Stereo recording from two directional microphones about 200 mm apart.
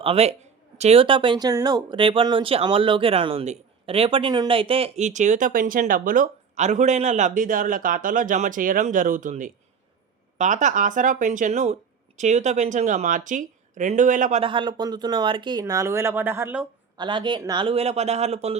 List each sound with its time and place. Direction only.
0.0 s speech: 30° right (ahead or behind)
14.4 s speech: 25° right (ahead or behind)
17.0 s speech: 25° right (ahead or behind)